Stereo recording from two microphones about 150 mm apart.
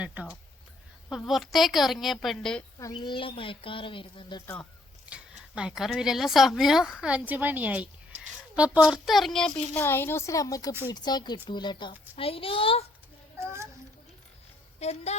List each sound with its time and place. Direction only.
0.0 s a woman's voice: 10° right (ahead or behind)
2.7 s speech: 30° left (ahead or behind)
5.0 s a woman's voice: 5° right (ahead or behind)
9.7 s a woman's voice: 15° left (ahead or behind); by 12.8 s 40° left (ahead or behind)
13.4 s a sound: 20° right (ahead or behind)
14.8 s speech: 45° left (ahead or behind)